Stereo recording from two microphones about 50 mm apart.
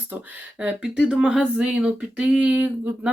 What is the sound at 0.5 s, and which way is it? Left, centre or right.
Speech, centre.